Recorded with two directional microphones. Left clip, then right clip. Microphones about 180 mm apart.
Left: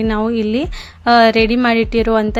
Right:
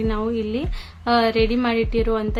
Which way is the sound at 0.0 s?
40° left (ahead or behind).